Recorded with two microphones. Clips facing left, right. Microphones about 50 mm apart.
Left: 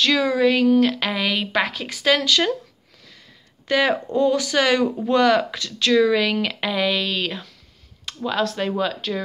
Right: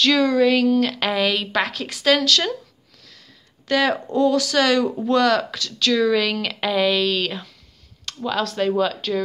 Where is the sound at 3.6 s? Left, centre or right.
Centre.